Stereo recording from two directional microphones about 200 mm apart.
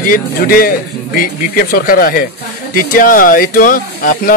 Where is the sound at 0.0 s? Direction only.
45° left (ahead or behind).